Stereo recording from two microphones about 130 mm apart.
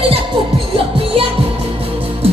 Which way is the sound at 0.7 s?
45° right (ahead or behind).